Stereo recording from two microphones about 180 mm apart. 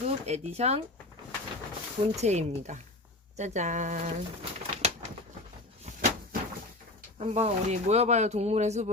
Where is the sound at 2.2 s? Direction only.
40° right (ahead or behind).